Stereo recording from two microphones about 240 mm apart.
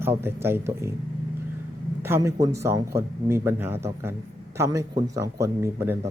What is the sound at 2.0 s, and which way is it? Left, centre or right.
Speech, centre.